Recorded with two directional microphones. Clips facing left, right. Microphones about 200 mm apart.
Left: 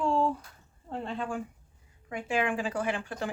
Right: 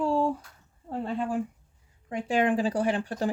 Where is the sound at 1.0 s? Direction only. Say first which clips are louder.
Right 5 dB; 5° right (ahead or behind).